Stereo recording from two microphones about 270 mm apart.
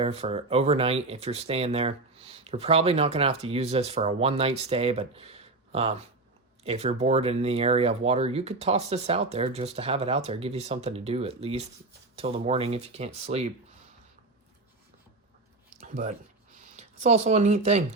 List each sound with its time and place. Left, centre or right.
0.0 s speech: right
15.8 s a sound: right
16.7 s speech: right